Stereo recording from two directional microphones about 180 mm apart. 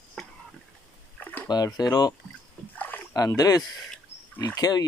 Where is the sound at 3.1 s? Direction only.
20° left (ahead or behind).